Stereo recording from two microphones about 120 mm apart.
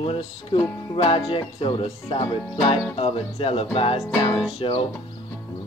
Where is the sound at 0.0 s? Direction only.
50° left (ahead or behind).